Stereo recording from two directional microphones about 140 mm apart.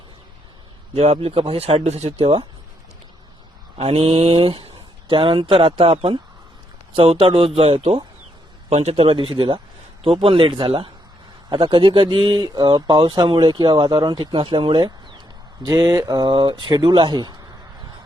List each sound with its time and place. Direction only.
0.9 s speech: 45° right (ahead or behind)
3.8 s speech: 45° right (ahead or behind)